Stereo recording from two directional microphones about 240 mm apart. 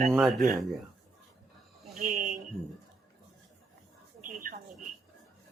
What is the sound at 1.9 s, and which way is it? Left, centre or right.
Speech, right.